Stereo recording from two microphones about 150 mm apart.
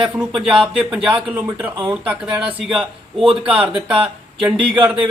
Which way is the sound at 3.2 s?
35° right (ahead or behind).